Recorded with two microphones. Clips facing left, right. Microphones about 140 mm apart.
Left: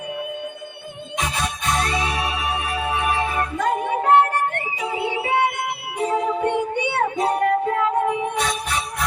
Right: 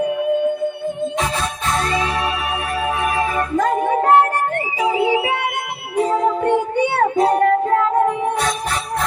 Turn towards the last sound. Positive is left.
turn(degrees=-40)  # may be behind; listen again after turning